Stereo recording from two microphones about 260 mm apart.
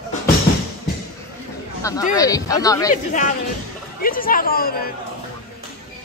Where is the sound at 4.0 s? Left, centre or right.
Left.